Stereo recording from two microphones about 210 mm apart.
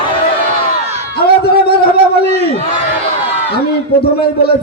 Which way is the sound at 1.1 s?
50° left (ahead or behind).